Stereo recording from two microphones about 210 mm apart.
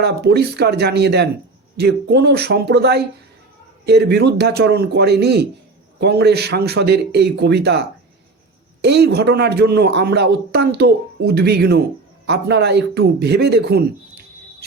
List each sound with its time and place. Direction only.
0.0 s speech: 50° right (ahead or behind)